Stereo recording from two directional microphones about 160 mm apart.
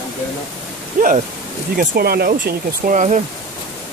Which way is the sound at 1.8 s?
75° right (ahead or behind).